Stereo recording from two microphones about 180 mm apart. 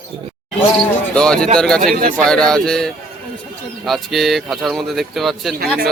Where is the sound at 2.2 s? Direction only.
5° left (ahead or behind).